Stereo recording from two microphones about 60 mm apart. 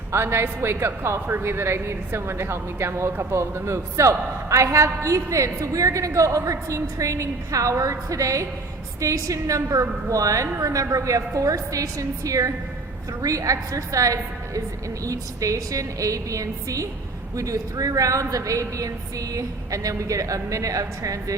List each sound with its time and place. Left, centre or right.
0.1 s a woman's voice: right